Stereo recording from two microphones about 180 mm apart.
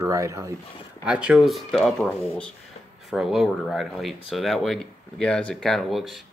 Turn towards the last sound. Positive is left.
turn(degrees=0)  # may be behind; listen again after turning